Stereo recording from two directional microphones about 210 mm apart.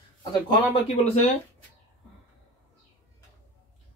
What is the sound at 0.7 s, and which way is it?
Speech, 30° left (ahead or behind).